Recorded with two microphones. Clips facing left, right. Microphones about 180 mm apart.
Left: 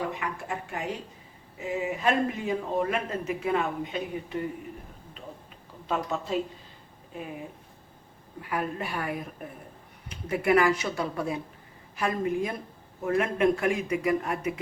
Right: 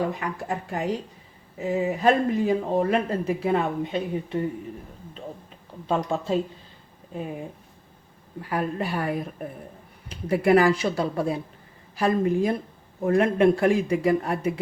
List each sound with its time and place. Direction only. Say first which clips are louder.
0.1 s speech: right 4 dB; 35° right (ahead or behind)
5.9 s speech: right 5 dB; 30° right (ahead or behind)
8.4 s speech: right 4 dB; 35° right (ahead or behind)